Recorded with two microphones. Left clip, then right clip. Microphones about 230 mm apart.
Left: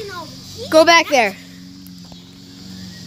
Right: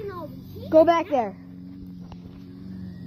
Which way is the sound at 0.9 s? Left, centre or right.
Left.